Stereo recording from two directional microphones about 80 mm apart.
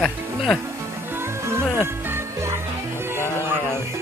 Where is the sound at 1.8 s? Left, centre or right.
Right.